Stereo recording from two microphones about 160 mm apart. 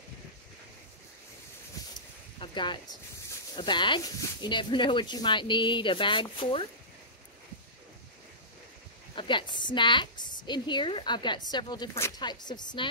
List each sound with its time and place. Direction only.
1.8 s a sound: 20° left (ahead or behind)
2.4 s a woman's voice: 30° left (ahead or behind)
9.1 s a woman's voice: 30° left (ahead or behind)